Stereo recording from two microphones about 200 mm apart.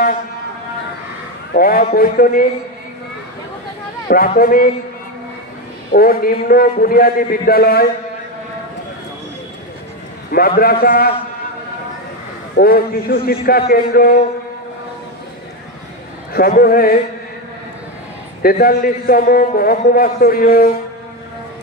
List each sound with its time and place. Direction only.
1.5 s a man's voice: 45° left (ahead or behind)
4.1 s a man's voice: 45° left (ahead or behind)
5.9 s a man's voice: 45° left (ahead or behind)
10.3 s a man's voice: 50° left (ahead or behind)
12.5 s a man's voice: 50° left (ahead or behind)
16.3 s a man's voice: 50° left (ahead or behind)
18.4 s a man's voice: 50° left (ahead or behind)